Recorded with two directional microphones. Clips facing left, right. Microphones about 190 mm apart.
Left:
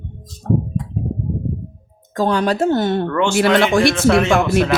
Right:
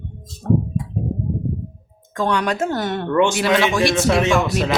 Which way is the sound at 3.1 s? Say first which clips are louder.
Right 2 dB; 15° right (ahead or behind).